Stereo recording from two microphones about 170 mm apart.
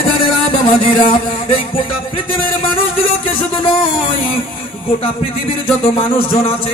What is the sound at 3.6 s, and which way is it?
Speech, 30° left (ahead or behind).